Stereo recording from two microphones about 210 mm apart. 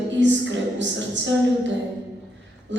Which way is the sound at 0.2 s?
60° right (ahead or behind).